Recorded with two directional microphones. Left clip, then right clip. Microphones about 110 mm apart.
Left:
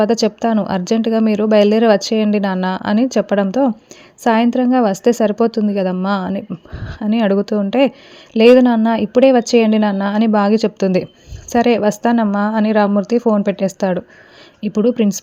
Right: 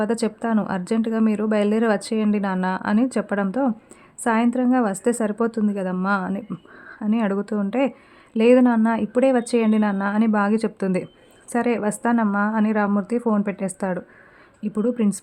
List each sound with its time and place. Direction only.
0.0 s speech: 35° left (ahead or behind)